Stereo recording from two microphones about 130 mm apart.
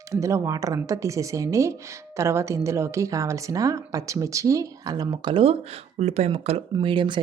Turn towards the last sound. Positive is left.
turn(degrees=-40)  # may be behind; listen again after turning